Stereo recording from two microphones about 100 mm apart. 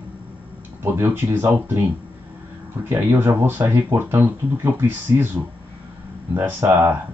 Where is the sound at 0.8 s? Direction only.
25° right (ahead or behind).